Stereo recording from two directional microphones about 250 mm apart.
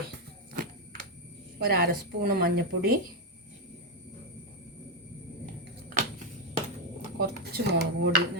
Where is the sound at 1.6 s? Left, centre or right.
Right.